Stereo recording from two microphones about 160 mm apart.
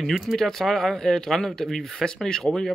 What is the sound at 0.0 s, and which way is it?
Speech, centre (ahead or behind).